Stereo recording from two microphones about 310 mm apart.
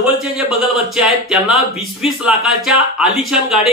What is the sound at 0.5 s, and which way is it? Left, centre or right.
Speech, centre.